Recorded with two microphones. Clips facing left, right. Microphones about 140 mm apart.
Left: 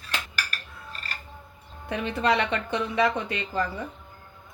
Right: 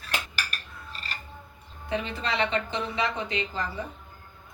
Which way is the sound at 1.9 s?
55° left (ahead or behind).